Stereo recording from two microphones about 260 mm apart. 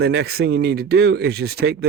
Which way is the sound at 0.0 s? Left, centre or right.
Right.